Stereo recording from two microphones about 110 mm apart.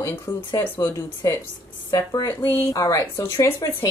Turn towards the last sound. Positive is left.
turn(degrees=30)  # may be behind; listen again after turning